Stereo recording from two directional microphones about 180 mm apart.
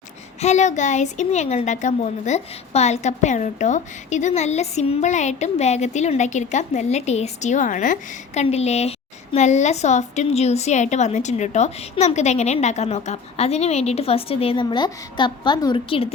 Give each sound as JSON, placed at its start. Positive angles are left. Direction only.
{"t": 0.4, "sound": "a woman's voice", "side_deg": 40}